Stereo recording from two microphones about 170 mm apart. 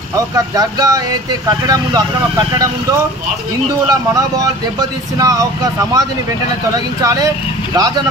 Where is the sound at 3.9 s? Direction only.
20° right (ahead or behind).